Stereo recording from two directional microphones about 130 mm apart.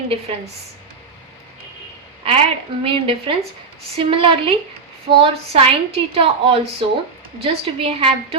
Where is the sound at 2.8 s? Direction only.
45° right (ahead or behind).